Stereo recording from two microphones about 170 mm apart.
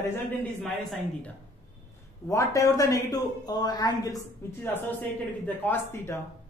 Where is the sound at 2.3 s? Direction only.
20° left (ahead or behind).